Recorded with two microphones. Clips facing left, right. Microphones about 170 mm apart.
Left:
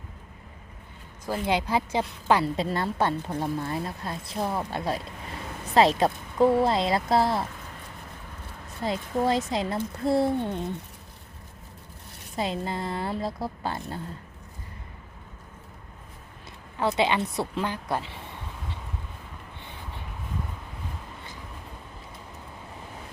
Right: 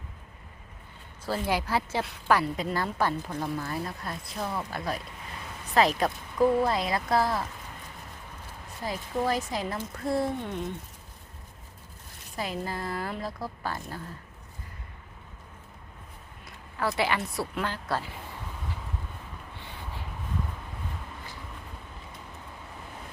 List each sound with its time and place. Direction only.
1.3 s a woman's voice: 20° left (ahead or behind)
8.8 s a woman's voice: 25° left (ahead or behind)
12.4 s a woman's voice: 25° left (ahead or behind)
16.7 s a woman's voice: 20° left (ahead or behind)